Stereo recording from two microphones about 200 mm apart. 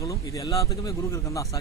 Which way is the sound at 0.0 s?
15° left (ahead or behind).